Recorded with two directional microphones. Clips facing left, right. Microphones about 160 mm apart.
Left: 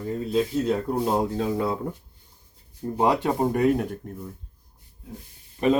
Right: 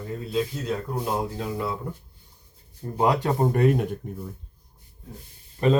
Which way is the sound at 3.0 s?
20° left (ahead or behind).